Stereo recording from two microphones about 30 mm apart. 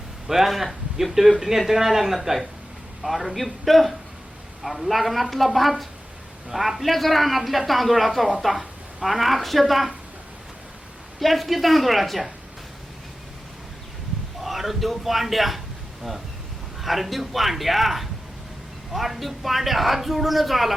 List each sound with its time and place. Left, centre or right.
0.3 s speech: centre
3.0 s a woman's voice: centre
11.2 s speech: centre
14.4 s a man's voice: centre
16.8 s speech: centre